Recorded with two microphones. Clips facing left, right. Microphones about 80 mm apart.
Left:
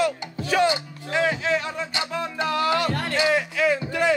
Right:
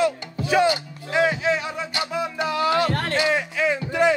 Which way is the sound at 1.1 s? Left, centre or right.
Centre.